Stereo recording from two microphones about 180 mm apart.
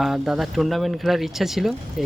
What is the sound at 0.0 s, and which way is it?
A man's voice, centre (ahead or behind).